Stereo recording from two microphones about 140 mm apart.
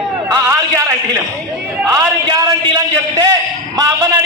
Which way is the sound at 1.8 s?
20° right (ahead or behind).